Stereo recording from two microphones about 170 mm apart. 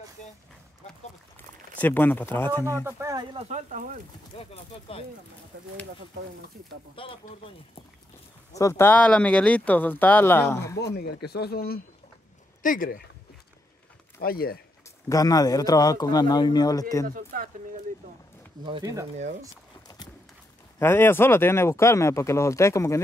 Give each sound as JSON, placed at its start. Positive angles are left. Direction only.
{"t": 1.8, "sound": "speech", "side_deg": 10}
{"t": 2.8, "sound": "speech", "side_deg": -15}
{"t": 3.3, "sound": "speech", "side_deg": -40}
{"t": 4.4, "sound": "speech", "side_deg": 35}
{"t": 7.0, "sound": "speech", "side_deg": 35}
{"t": 8.5, "sound": "speech", "side_deg": 15}
{"t": 11.0, "sound": "speech", "side_deg": 65}
{"t": 14.2, "sound": "speech", "side_deg": 60}
{"t": 15.0, "sound": "a man's voice", "side_deg": 20}
{"t": 17.0, "sound": "speech", "side_deg": -55}
{"t": 18.7, "sound": "speech", "side_deg": -20}
{"t": 20.8, "sound": "speech", "side_deg": 15}